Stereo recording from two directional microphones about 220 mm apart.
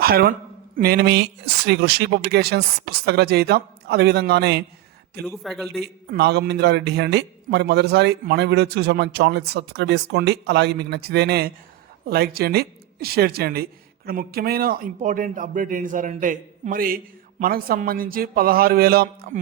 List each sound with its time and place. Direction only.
0.0 s a man's voice: 45° right (ahead or behind)
5.4 s a man's voice: centre (ahead or behind)
5.8 s a man's voice: 50° right (ahead or behind)